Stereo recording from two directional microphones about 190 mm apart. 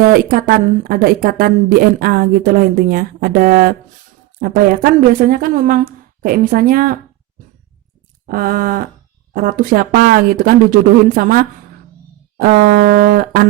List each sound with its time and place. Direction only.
0.1 s a woman's voice: 50° right (ahead or behind)
8.3 s a woman's voice: 50° right (ahead or behind)